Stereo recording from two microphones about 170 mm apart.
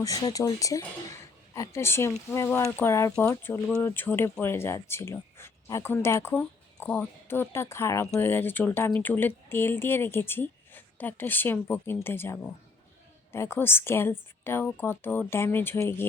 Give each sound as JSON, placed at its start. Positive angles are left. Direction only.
{"t": 0.0, "sound": "speech", "side_deg": 20}